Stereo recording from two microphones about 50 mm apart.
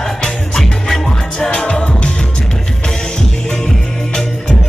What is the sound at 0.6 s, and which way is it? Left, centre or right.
Music, centre.